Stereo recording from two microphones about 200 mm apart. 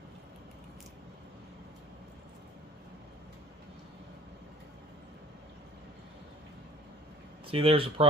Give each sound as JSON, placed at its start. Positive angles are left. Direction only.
{"t": 7.4, "sound": "speech", "side_deg": -30}